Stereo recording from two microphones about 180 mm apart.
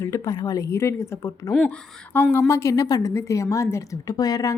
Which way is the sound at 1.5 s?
5° left (ahead or behind).